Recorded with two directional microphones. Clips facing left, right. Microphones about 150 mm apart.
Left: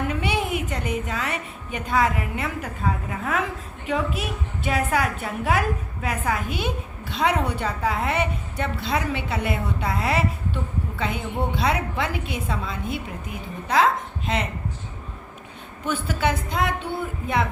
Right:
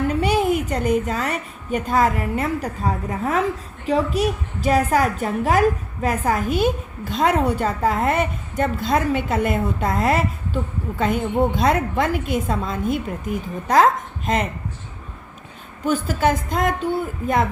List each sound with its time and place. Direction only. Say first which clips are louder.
0.1 s music: right 6 dB; 40° right (ahead or behind)
0.7 s a woman's voice: right 7 dB; 40° right (ahead or behind)
15.8 s a woman's voice: right 5 dB; 40° right (ahead or behind)